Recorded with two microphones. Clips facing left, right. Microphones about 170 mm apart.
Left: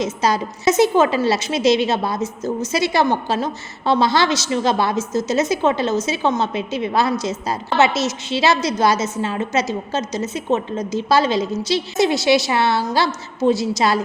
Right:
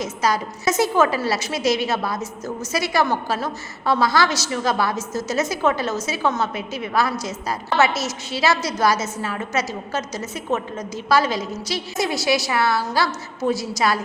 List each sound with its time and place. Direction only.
0.0 s a woman's voice: 25° left (ahead or behind)